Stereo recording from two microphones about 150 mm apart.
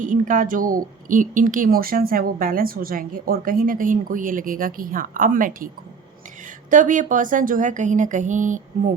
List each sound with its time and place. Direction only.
0.0 s a woman's voice: 60° right (ahead or behind)